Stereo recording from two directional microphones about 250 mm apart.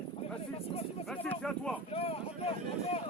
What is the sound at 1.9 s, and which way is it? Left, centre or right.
Speech, left.